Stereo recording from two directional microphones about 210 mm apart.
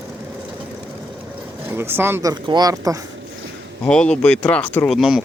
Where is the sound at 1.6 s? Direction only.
10° right (ahead or behind).